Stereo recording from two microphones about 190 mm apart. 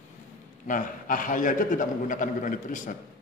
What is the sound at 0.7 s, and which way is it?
A man's voice, 45° left (ahead or behind).